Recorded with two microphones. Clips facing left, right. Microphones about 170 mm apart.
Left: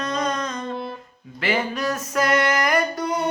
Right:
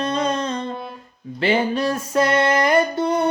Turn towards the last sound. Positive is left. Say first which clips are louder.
# right 4 dB
turn(degrees=-25)  # may be behind; listen again after turning